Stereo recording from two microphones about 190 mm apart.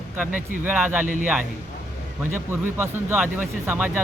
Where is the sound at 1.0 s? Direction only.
45° right (ahead or behind).